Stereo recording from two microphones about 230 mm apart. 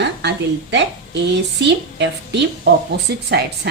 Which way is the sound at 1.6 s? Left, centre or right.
Right.